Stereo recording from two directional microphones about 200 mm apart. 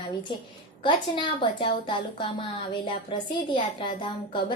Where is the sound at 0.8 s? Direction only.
25° left (ahead or behind).